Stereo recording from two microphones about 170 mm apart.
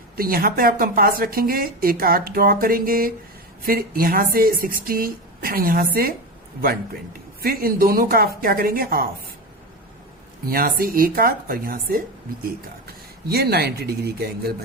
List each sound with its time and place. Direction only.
0.2 s a woman's voice: 60° right (ahead or behind)
10.4 s a woman's voice: 60° right (ahead or behind)
13.2 s speech: 70° right (ahead or behind)